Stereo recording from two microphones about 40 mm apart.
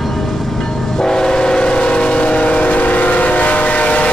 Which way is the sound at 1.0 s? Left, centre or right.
Centre.